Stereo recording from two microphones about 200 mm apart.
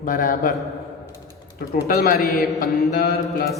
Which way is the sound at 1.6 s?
50° left (ahead or behind).